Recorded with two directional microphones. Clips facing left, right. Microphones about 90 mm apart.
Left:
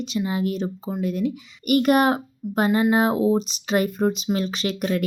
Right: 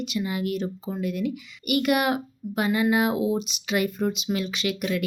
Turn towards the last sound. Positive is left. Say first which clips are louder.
# left 3 dB
turn(degrees=40)  # may be behind; listen again after turning